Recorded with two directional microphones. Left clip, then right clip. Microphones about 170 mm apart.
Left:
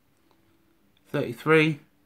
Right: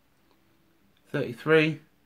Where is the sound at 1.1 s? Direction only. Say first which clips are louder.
Left 1 dB; 25° left (ahead or behind).